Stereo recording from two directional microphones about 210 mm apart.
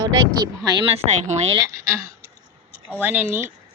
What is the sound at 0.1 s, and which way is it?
Speech, 15° right (ahead or behind).